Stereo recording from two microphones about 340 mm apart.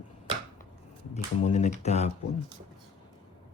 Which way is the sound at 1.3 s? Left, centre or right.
Centre.